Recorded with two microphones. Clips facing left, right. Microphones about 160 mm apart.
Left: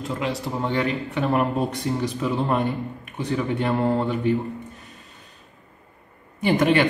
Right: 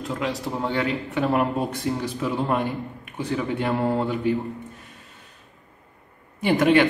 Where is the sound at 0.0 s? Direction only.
Centre (ahead or behind).